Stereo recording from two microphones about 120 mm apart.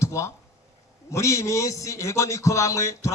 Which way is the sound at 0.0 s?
25° left (ahead or behind).